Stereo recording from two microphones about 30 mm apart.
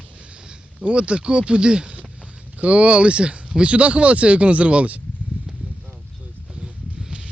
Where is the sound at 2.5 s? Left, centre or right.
Right.